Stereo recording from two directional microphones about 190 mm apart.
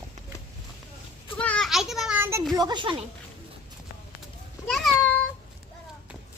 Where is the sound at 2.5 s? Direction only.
20° right (ahead or behind).